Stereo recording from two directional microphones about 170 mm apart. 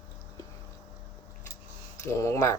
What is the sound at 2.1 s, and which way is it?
Speech, 15° left (ahead or behind).